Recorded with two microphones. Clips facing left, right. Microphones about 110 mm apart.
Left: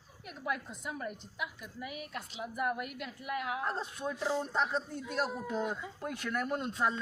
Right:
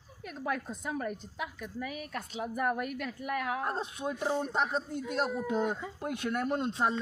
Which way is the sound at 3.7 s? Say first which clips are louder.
Right 2 dB; 15° right (ahead or behind).